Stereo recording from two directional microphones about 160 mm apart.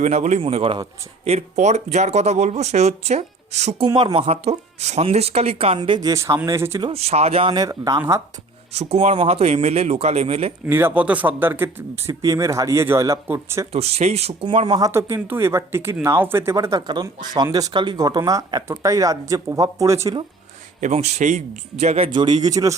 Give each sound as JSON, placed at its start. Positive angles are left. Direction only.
{"t": 0.0, "sound": "a man's voice", "side_deg": -45}
{"t": 3.8, "sound": "speech", "side_deg": -30}
{"t": 6.8, "sound": "speech", "side_deg": -40}
{"t": 7.5, "sound": "speech", "side_deg": -20}
{"t": 8.7, "sound": "speech", "side_deg": -40}
{"t": 10.7, "sound": "speech", "side_deg": -15}
{"t": 13.7, "sound": "speech", "side_deg": -40}
{"t": 14.8, "sound": "speech", "side_deg": -20}
{"t": 20.8, "sound": "a man's voice", "side_deg": -45}